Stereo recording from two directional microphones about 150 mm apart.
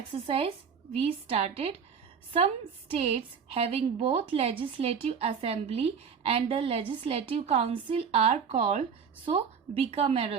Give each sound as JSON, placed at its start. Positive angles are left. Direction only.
{"t": 0.1, "sound": "a woman's voice", "side_deg": -35}
{"t": 2.9, "sound": "a woman's voice", "side_deg": -40}